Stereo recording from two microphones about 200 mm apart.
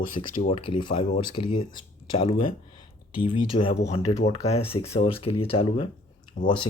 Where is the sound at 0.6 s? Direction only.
25° left (ahead or behind).